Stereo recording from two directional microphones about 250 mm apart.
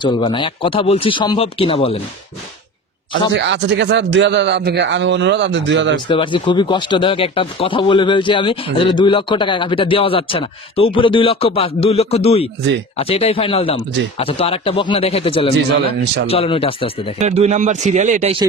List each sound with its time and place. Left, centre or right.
0.0 s speech: centre
3.3 s a man's voice: right
6.0 s speech: centre
17.2 s speech: right